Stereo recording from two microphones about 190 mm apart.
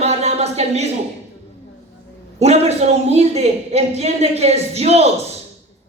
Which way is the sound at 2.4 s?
35° right (ahead or behind).